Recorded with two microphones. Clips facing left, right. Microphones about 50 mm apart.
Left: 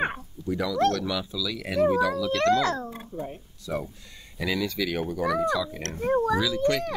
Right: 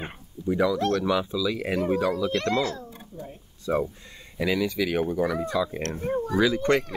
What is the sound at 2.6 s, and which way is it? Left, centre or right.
Speech, left.